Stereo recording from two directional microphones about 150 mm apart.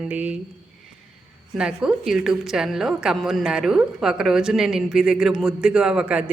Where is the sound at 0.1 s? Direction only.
10° right (ahead or behind).